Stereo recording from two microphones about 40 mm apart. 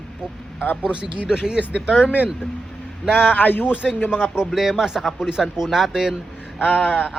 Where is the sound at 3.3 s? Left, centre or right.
Left.